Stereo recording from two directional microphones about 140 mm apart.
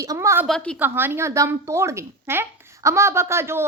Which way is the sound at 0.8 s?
15° right (ahead or behind).